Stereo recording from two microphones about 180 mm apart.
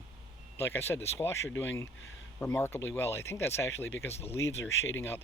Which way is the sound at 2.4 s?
15° left (ahead or behind).